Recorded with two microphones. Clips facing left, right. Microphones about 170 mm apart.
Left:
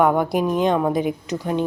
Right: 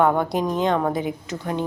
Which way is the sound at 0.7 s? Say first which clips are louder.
Left 2 dB; 15° left (ahead or behind).